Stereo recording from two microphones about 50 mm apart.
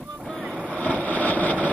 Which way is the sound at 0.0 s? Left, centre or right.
Centre.